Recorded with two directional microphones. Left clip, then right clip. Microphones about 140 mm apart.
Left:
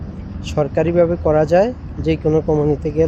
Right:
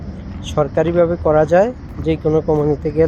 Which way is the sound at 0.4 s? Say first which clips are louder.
Right 1 dB; 10° left (ahead or behind).